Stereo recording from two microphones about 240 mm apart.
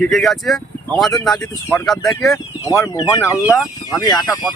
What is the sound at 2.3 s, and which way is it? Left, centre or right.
Speech, centre.